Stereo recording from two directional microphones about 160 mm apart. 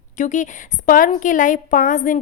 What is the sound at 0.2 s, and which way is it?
A woman's voice, 50° left (ahead or behind).